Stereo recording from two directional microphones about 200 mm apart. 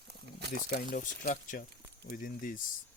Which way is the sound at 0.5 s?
45° left (ahead or behind).